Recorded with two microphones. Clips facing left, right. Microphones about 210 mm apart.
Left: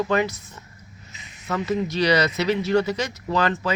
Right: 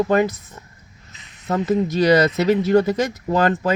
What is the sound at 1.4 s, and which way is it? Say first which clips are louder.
Speech: right 5 dB; 40° right (ahead or behind).